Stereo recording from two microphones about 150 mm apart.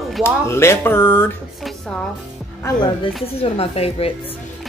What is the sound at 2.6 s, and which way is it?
Speech, 30° left (ahead or behind).